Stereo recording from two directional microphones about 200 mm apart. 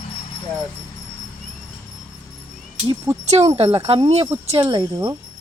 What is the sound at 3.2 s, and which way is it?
Speech, 35° right (ahead or behind).